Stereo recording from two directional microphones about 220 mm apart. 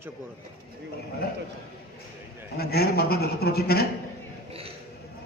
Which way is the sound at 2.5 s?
45° left (ahead or behind).